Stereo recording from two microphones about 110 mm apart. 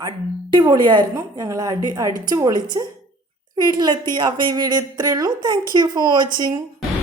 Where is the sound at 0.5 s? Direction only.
40° right (ahead or behind).